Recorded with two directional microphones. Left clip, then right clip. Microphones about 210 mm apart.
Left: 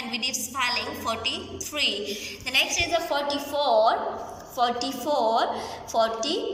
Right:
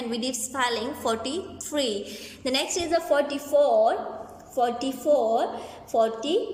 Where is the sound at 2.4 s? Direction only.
55° right (ahead or behind).